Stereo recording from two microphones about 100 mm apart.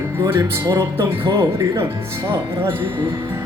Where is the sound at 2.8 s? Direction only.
55° right (ahead or behind).